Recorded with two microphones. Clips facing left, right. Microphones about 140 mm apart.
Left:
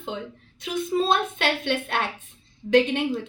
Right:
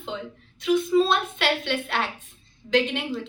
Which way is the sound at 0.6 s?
50° left (ahead or behind).